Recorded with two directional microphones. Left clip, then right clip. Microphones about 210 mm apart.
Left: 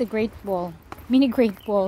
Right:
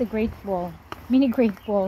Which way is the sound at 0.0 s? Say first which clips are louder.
Left 1 dB; 20° left (ahead or behind).